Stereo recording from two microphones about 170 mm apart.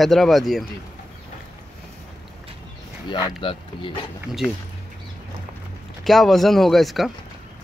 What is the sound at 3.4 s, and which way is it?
Speech, 30° left (ahead or behind).